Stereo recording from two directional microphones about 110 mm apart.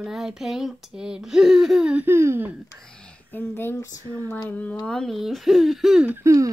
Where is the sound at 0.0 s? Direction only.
5° right (ahead or behind).